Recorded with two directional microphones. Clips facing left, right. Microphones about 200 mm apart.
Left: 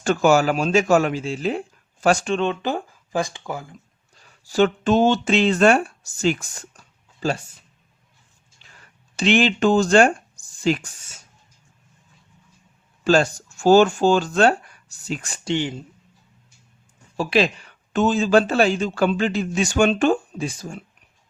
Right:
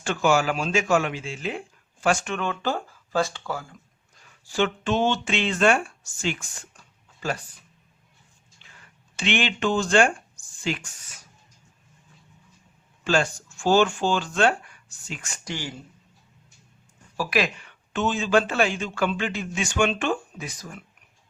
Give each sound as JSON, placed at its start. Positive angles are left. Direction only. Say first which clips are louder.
{"t": 0.0, "sound": "speech", "louder": "left 5 dB", "side_deg": 45}
{"t": 4.4, "sound": "speech", "louder": "left 6 dB", "side_deg": 40}
{"t": 7.2, "sound": "speech", "louder": "left 5 dB", "side_deg": 30}
{"t": 9.1, "sound": "speech", "louder": "left 7 dB", "side_deg": 35}
{"t": 13.1, "sound": "speech", "louder": "left 6 dB", "side_deg": 40}
{"t": 15.5, "sound": "speech", "louder": "left 10 dB", "side_deg": 20}
{"t": 17.2, "sound": "speech", "louder": "left 5 dB", "side_deg": 30}